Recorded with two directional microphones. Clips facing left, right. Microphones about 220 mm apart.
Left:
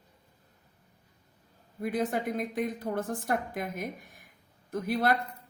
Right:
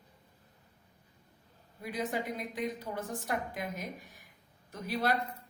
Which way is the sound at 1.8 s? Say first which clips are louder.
Left 5 dB; 55° left (ahead or behind).